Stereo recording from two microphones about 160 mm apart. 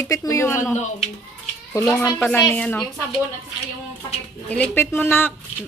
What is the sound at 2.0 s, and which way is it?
Speech, 10° left (ahead or behind).